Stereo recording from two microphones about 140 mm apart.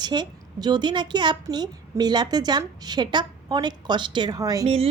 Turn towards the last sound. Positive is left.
turn(degrees=-25)  # may be behind; listen again after turning